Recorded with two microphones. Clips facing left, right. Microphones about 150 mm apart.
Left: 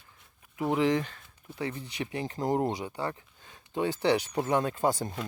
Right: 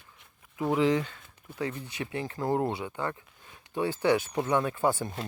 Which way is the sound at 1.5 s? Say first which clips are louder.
Right 1 dB; 30° left (ahead or behind).